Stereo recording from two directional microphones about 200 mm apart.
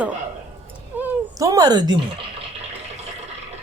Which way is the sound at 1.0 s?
15° right (ahead or behind).